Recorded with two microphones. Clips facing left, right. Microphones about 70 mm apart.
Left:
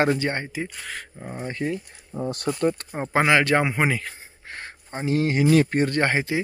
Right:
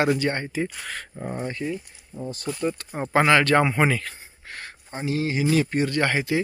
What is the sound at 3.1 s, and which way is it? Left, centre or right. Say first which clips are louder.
Speech: right 1 dB; centre.